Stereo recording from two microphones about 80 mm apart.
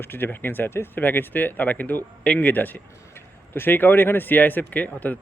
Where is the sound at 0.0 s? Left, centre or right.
Left.